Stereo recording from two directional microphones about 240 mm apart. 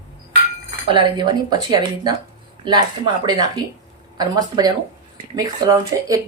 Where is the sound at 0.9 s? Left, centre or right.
Centre.